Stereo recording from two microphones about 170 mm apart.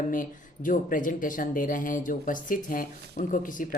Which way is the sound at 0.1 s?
50° left (ahead or behind).